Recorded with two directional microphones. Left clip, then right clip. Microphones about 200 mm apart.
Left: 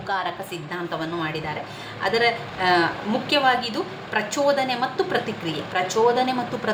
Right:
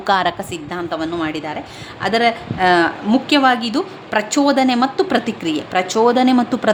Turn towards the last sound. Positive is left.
turn(degrees=-55)  # may be behind; listen again after turning